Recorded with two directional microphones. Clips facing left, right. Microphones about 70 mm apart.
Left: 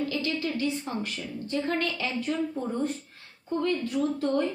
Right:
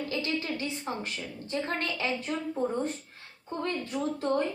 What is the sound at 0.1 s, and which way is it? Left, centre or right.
A woman's voice, right.